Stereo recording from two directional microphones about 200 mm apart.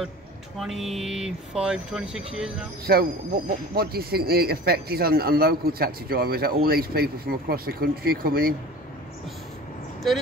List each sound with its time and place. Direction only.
0.6 s speech: centre (ahead or behind)
2.9 s speech: 50° right (ahead or behind)
10.1 s speech: centre (ahead or behind)